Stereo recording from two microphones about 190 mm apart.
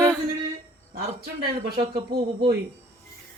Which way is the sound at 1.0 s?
55° right (ahead or behind).